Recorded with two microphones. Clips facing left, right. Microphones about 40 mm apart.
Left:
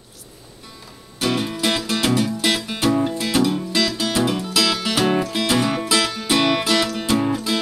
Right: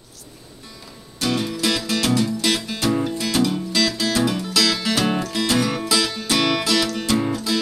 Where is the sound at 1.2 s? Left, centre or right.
Centre.